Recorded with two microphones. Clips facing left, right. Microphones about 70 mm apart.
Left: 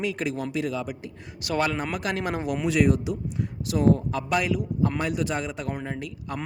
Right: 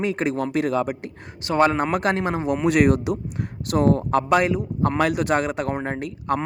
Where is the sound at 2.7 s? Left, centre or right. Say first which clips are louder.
Right 4 dB; right.